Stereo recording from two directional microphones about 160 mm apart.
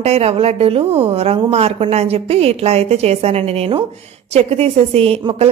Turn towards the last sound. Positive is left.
turn(degrees=-40)  # may be behind; listen again after turning